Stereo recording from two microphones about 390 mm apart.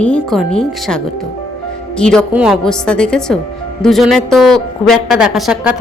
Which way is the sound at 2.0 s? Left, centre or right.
Centre.